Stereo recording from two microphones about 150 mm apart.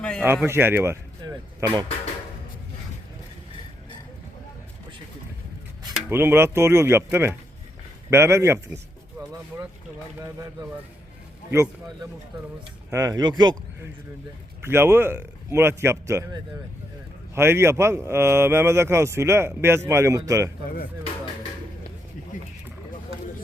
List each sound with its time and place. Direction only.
0.0 s speech: 5° left (ahead or behind)
0.4 s speech: 15° right (ahead or behind)
1.2 s speech: 30° right (ahead or behind)
5.9 s speech: 15° right (ahead or behind)
10.2 s speech: 20° right (ahead or behind)
12.9 s speech: 25° right (ahead or behind)
14.6 s speech: 15° right (ahead or behind)